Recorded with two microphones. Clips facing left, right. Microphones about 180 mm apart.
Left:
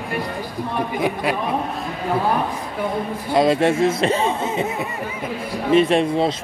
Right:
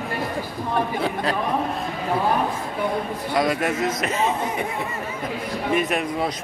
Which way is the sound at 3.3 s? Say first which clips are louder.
Left 6 dB; 25° left (ahead or behind).